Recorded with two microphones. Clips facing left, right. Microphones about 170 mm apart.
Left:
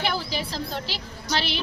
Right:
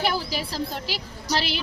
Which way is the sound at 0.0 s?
10° right (ahead or behind).